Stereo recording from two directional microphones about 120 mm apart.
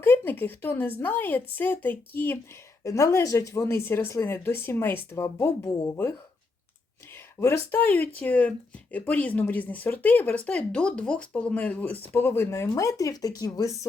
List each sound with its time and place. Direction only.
0.0 s speech: 15° left (ahead or behind)
2.8 s speech: 25° left (ahead or behind)
7.3 s speech: 25° left (ahead or behind)